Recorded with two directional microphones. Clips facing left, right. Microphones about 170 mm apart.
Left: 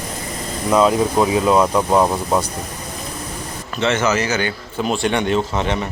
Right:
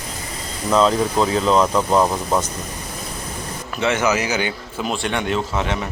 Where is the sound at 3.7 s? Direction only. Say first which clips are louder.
Left 1 dB; 10° right (ahead or behind).